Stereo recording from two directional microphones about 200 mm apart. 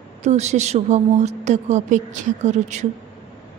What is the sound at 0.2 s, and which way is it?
A woman's voice, 35° right (ahead or behind).